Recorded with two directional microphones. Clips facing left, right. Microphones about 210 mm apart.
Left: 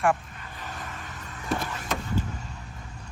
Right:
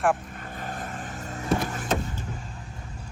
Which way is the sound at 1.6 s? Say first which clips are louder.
Right 4 dB; 45° right (ahead or behind).